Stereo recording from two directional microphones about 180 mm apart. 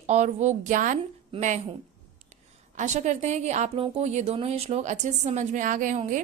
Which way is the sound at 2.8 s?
40° right (ahead or behind).